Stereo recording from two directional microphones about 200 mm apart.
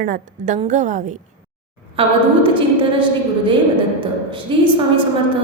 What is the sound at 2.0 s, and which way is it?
A woman's voice, 25° right (ahead or behind).